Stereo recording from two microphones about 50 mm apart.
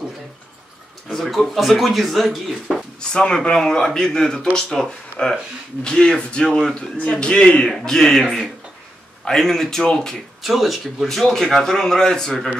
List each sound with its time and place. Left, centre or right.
1.0 s speech: centre
3.0 s a man's voice: centre
10.4 s a man's voice: centre